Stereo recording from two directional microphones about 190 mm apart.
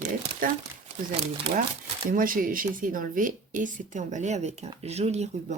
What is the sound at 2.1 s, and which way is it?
A woman's voice, 45° right (ahead or behind).